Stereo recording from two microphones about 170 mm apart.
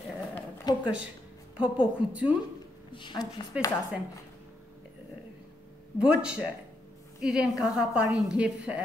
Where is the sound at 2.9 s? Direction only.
25° left (ahead or behind).